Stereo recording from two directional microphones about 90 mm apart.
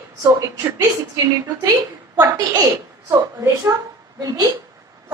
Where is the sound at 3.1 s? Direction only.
35° right (ahead or behind).